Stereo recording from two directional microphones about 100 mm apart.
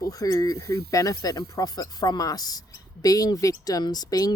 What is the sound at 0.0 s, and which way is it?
Speech, 35° left (ahead or behind).